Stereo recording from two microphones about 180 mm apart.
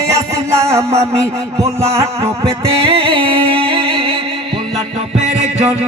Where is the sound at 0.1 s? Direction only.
15° right (ahead or behind).